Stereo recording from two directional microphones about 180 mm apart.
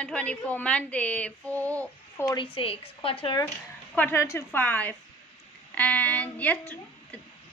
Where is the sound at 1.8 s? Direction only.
15° left (ahead or behind).